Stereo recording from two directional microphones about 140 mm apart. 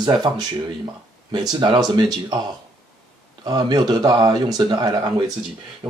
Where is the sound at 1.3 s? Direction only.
35° right (ahead or behind).